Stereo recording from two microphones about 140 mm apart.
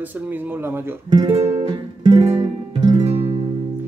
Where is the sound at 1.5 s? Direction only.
35° right (ahead or behind).